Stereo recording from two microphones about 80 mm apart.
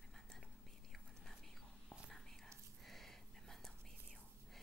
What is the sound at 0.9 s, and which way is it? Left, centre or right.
Whispering, centre.